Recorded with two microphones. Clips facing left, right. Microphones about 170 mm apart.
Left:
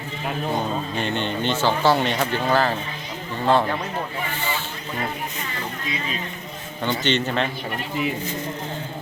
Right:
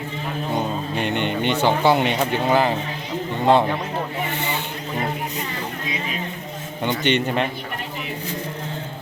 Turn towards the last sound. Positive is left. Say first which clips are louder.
# right 2 dB
turn(degrees=-10)  # may be behind; listen again after turning